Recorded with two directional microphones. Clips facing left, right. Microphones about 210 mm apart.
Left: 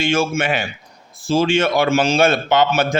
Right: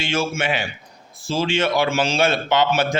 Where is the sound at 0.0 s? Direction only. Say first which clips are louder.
Left 4 dB; 50° left (ahead or behind).